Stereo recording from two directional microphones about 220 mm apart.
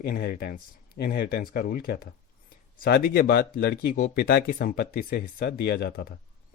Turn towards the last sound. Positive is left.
turn(degrees=45)  # may be behind; listen again after turning